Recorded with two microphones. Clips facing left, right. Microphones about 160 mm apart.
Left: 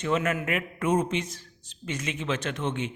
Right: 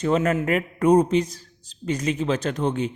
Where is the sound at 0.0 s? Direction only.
35° right (ahead or behind).